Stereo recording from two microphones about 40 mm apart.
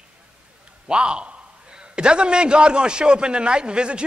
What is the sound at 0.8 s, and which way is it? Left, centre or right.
A man's voice, right.